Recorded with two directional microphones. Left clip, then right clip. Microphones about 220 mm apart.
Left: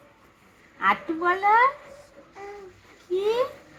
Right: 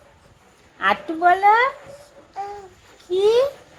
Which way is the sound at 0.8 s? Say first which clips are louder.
Right 5 dB; 40° right (ahead or behind).